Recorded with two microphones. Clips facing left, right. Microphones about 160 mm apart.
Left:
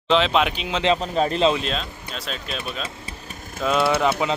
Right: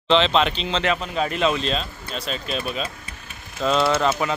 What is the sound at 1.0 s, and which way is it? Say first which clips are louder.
Speech: left 3 dB; 35° left (ahead or behind).